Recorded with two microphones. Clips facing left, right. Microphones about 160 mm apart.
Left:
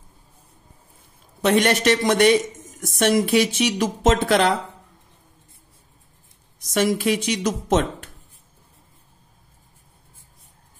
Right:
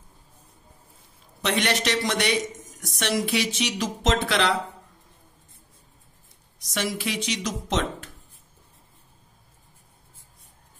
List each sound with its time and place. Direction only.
1.4 s speech: 50° left (ahead or behind)
6.6 s speech: 50° left (ahead or behind)